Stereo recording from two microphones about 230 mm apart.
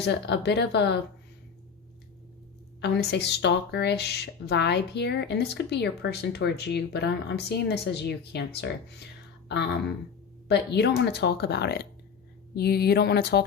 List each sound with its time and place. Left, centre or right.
0.0 s speech: left
2.8 s speech: left
10.5 s speech: left